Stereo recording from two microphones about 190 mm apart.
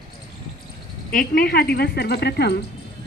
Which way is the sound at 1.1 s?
50° left (ahead or behind).